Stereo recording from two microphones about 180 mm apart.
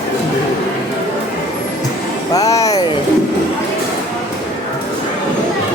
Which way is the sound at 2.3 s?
20° left (ahead or behind).